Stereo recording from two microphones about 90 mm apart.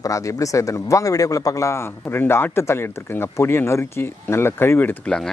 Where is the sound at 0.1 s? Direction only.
40° left (ahead or behind).